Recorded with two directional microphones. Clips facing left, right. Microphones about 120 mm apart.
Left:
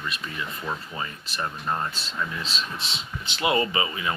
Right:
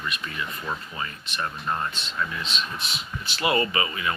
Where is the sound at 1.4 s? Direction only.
20° left (ahead or behind).